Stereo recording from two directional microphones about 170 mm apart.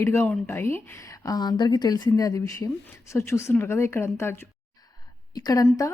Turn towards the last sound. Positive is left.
turn(degrees=20)  # may be behind; listen again after turning